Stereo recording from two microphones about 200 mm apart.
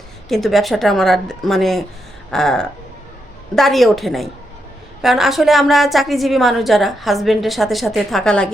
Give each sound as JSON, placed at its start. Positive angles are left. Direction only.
{"t": 0.3, "sound": "a woman's voice", "side_deg": 0}